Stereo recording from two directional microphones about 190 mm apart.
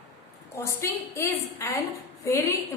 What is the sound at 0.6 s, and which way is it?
A woman's voice, 15° left (ahead or behind).